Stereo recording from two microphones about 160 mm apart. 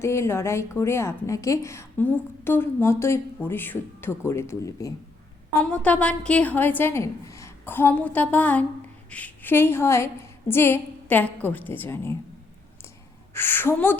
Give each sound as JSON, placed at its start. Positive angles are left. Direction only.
{"t": 0.0, "sound": "a woman's voice", "side_deg": 15}
{"t": 5.5, "sound": "a woman's voice", "side_deg": 5}
{"t": 13.3, "sound": "a woman's voice", "side_deg": 15}